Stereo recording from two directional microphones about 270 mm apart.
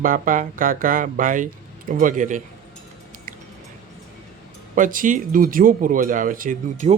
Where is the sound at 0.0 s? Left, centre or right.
Right.